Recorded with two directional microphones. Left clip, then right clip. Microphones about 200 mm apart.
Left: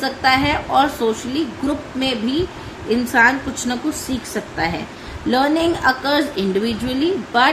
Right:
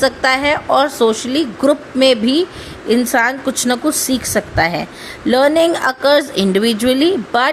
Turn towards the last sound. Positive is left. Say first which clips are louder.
# right 3 dB
turn(degrees=-50)  # may be behind; listen again after turning